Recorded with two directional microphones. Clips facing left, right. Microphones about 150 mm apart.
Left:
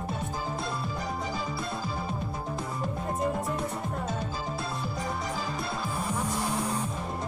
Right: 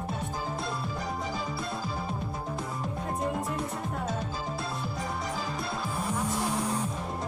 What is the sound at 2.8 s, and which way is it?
Music, centre (ahead or behind).